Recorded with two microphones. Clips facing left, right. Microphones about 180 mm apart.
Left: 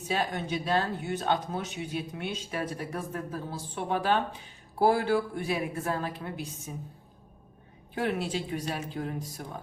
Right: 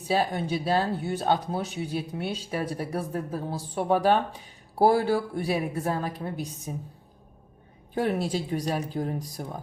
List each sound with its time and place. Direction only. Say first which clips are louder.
0.0 s speech: right 5 dB; 35° right (ahead or behind)
7.9 s speech: right 4 dB; 40° right (ahead or behind)